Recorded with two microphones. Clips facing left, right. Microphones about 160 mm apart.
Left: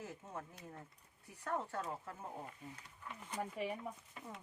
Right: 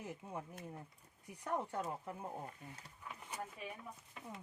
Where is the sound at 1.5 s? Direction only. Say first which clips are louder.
Right 1 dB; 15° right (ahead or behind).